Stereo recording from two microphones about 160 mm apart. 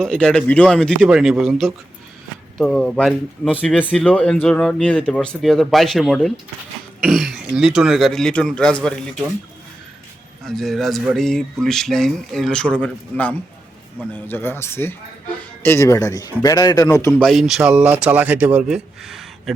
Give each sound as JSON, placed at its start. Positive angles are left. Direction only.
{"t": 0.0, "sound": "speech", "side_deg": 5}
{"t": 10.4, "sound": "a man's voice", "side_deg": 0}
{"t": 17.2, "sound": "speech", "side_deg": 0}